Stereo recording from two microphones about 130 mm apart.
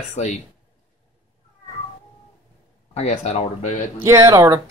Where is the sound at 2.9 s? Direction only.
60° left (ahead or behind).